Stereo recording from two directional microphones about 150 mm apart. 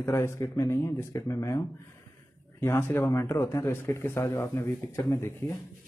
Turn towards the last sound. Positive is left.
turn(degrees=15)  # may be behind; listen again after turning